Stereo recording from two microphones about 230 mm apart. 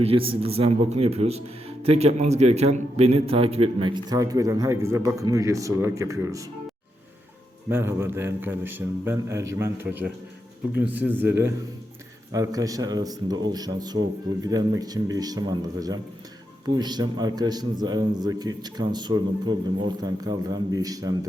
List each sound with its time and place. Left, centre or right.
0.0 s speech: right
7.7 s a man's voice: centre